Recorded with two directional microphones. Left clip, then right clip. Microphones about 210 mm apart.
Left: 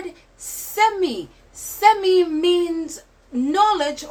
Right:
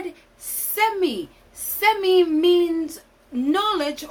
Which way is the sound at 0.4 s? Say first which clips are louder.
Left 3 dB; 5° right (ahead or behind).